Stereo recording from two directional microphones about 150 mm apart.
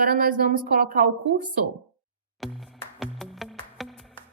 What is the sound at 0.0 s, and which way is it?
A woman's voice, 70° right (ahead or behind).